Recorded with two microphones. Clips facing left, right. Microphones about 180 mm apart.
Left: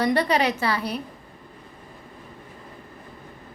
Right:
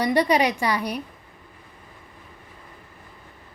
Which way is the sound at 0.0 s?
10° right (ahead or behind).